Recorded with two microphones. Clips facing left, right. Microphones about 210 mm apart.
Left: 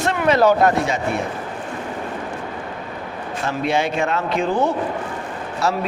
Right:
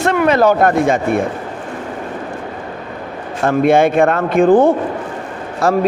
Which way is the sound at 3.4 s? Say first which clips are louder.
Right 10 dB; 55° right (ahead or behind).